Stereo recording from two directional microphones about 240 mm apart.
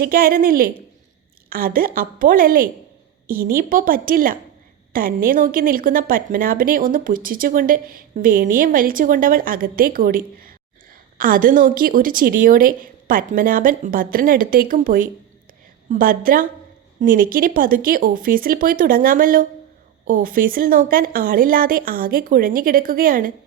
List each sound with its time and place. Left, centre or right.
0.0 s a woman's voice: right